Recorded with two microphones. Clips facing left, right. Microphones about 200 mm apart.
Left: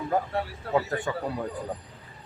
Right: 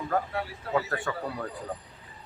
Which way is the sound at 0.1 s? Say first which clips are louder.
Left 2 dB; 15° left (ahead or behind).